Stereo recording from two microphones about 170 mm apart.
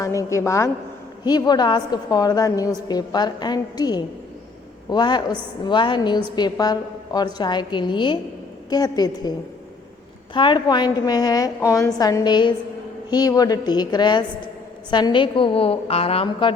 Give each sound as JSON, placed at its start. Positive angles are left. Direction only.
{"t": 0.0, "sound": "a woman's voice", "side_deg": 20}
{"t": 10.3, "sound": "a woman's voice", "side_deg": 30}